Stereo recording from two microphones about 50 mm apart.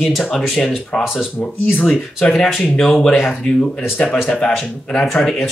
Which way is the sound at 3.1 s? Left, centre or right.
Centre.